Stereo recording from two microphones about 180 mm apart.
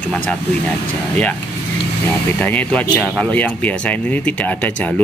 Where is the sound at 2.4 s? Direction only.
10° left (ahead or behind).